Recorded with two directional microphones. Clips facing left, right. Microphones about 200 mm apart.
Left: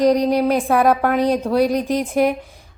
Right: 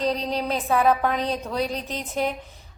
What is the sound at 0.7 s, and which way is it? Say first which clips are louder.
Speech: left 4 dB; 75° left (ahead or behind).